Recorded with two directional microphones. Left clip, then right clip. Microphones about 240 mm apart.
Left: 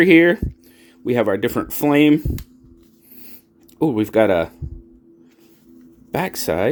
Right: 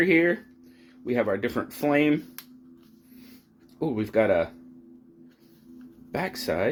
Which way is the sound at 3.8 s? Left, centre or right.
Left.